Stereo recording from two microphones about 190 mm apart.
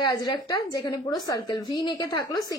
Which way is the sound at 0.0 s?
20° left (ahead or behind).